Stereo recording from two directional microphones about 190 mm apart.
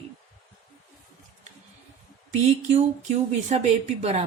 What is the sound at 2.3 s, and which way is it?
Speech, 35° right (ahead or behind).